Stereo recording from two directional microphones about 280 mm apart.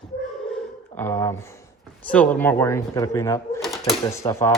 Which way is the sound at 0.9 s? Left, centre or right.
Centre.